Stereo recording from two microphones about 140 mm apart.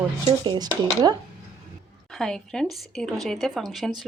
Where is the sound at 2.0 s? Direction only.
5° left (ahead or behind).